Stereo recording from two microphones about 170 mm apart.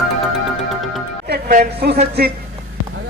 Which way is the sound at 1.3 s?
65° right (ahead or behind).